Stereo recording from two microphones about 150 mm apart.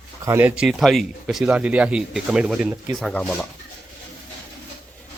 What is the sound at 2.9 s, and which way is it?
Speech, 5° left (ahead or behind).